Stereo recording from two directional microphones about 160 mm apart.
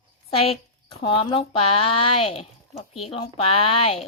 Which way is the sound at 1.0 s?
35° left (ahead or behind).